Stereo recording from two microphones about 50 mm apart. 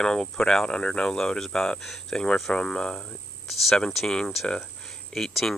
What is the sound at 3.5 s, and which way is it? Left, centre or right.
Speech, centre.